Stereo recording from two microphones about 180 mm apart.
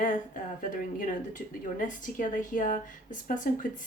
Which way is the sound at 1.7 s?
45° left (ahead or behind).